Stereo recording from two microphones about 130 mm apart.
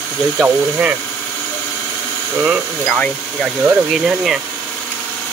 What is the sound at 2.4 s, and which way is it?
Speech, 5° left (ahead or behind).